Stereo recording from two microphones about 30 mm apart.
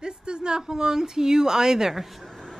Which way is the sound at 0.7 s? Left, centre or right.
Right.